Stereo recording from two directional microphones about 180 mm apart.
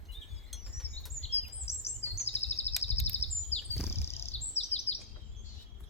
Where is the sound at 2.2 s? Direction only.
35° left (ahead or behind).